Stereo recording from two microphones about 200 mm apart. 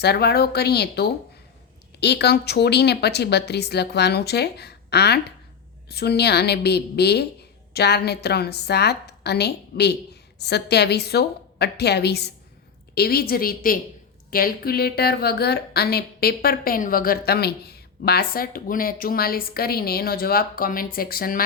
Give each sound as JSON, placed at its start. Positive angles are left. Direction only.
{"t": 0.0, "sound": "a woman's voice", "side_deg": 55}